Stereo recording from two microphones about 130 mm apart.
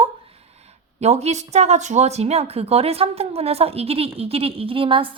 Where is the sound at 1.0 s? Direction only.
55° right (ahead or behind).